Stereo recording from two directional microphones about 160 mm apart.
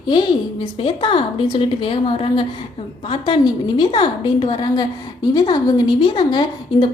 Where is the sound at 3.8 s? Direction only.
30° left (ahead or behind).